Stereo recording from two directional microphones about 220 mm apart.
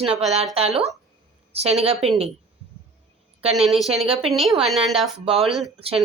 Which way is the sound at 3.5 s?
Centre (ahead or behind).